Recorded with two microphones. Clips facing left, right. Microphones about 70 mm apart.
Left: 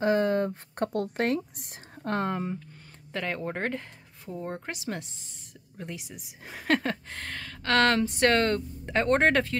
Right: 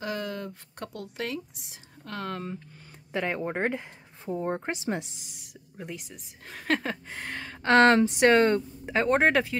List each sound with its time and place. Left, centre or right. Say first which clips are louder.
0.0 s speech: left 9 dB; left
2.2 s speech: left 4 dB; centre
3.1 s a woman's voice: right 2 dB; centre
4.3 s a woman's voice: right 5 dB; right
5.3 s a woman's voice: right 1 dB; centre
7.2 s a woman's voice: right 4 dB; centre